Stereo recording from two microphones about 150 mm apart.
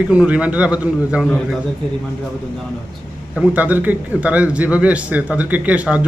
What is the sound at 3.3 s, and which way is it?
A man's voice, 10° right (ahead or behind).